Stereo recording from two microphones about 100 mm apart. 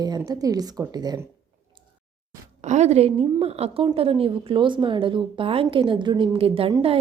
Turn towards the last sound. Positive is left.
turn(degrees=-70)  # may be behind; listen again after turning